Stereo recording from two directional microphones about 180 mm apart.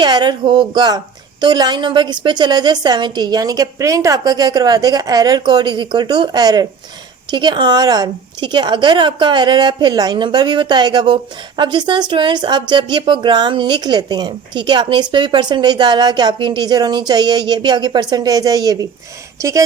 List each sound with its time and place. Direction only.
0.0 s a woman's voice: 25° right (ahead or behind)